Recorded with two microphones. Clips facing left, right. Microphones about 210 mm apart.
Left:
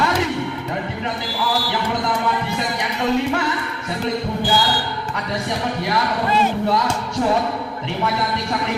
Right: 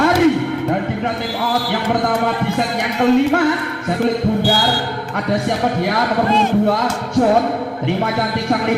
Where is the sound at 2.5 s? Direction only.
55° right (ahead or behind).